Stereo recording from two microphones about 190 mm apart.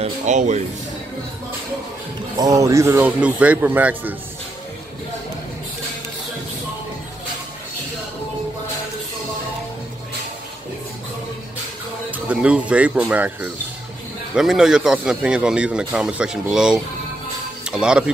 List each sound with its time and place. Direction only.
0.0 s speech: 40° right (ahead or behind)
2.3 s speech: 20° right (ahead or behind)
12.1 s speech: 5° right (ahead or behind)